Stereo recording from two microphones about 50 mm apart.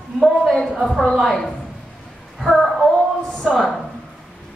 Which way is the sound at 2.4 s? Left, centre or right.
Centre.